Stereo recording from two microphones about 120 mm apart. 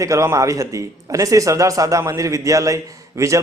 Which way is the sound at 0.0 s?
25° right (ahead or behind).